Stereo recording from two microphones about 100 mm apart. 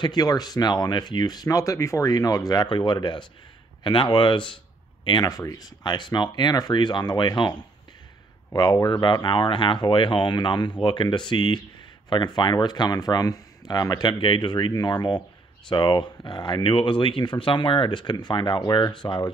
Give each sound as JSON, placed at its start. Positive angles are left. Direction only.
{"t": 0.0, "sound": "speech", "side_deg": 45}
{"t": 5.2, "sound": "speech", "side_deg": 35}
{"t": 8.5, "sound": "speech", "side_deg": 45}